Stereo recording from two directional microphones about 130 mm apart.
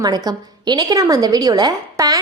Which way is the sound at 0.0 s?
30° right (ahead or behind).